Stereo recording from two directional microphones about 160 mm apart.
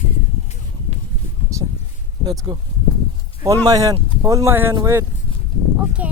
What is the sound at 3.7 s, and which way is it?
Speech, 20° right (ahead or behind).